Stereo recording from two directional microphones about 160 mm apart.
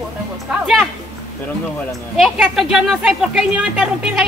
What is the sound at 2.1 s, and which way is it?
Speech, centre (ahead or behind).